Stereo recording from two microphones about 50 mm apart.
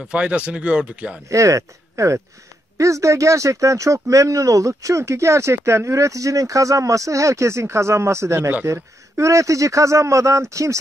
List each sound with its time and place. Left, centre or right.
0.0 s speech: right
1.3 s speech: right
8.6 s speech: right